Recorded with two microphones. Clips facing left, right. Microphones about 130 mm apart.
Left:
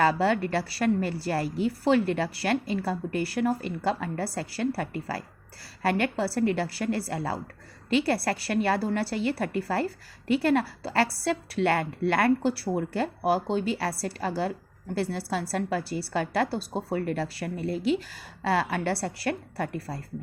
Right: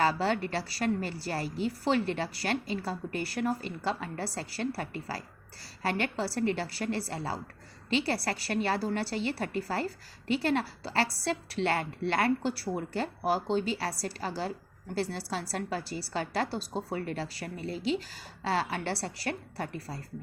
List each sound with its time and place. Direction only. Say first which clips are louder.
0.0 s a woman's voice: left 4 dB; 50° left (ahead or behind)